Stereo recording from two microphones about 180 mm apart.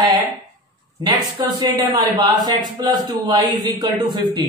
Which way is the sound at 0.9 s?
25° right (ahead or behind).